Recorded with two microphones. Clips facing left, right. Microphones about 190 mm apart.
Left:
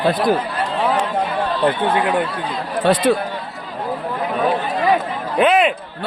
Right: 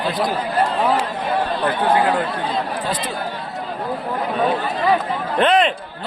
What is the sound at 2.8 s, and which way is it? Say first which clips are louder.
Speech: left 9 dB; 70° left (ahead or behind).